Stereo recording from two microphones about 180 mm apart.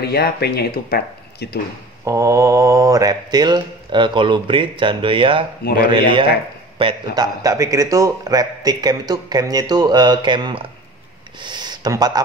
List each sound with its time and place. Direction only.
0.0 s speech: 60° left (ahead or behind)
2.0 s a man's voice: 15° right (ahead or behind)